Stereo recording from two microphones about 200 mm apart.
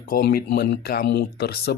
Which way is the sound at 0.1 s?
45° left (ahead or behind).